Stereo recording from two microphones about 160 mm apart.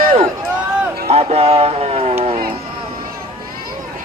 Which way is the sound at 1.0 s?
40° right (ahead or behind).